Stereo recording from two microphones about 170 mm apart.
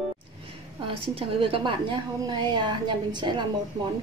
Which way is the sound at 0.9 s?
30° right (ahead or behind).